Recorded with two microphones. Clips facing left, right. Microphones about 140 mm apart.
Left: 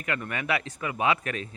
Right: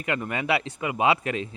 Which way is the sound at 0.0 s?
25° right (ahead or behind).